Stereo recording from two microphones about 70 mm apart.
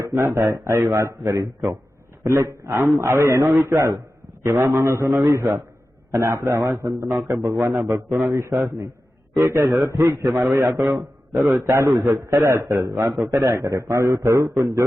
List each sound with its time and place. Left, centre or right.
0.0 s a man's voice: right
11.7 s a man's voice: right